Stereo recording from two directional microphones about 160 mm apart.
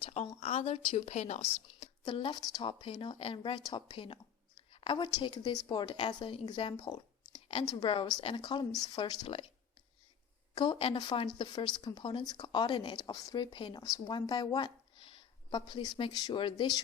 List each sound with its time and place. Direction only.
0.0 s a sound: 40° left (ahead or behind)
0.3 s speech: 40° left (ahead or behind)
2.0 s a woman's voice: 30° left (ahead or behind)
10.5 s speech: 30° left (ahead or behind)
14.0 s a sound: 25° left (ahead or behind)
15.7 s speech: 30° left (ahead or behind)